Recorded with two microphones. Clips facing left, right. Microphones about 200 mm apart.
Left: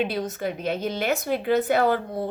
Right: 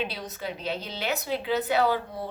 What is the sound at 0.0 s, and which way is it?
A woman's voice, 50° left (ahead or behind).